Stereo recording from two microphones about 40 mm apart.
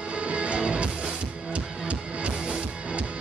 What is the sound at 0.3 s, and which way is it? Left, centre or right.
Music, right.